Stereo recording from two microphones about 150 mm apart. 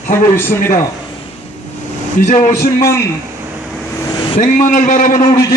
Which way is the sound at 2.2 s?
55° left (ahead or behind).